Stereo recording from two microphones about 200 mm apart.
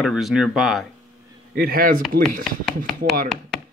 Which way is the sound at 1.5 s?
50° right (ahead or behind).